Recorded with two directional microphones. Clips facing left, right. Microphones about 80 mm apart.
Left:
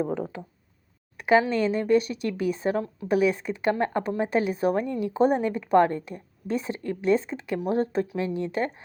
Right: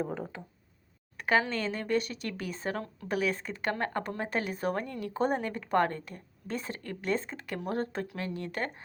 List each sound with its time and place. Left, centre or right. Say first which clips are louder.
1.2 s speech: left 7 dB; centre